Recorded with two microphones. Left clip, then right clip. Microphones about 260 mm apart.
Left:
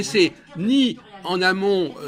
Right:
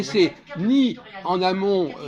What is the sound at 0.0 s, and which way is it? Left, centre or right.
A man's voice, left.